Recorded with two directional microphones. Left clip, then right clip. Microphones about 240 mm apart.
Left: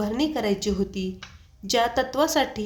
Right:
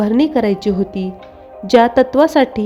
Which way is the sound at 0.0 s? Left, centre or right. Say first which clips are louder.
Right 11 dB; right.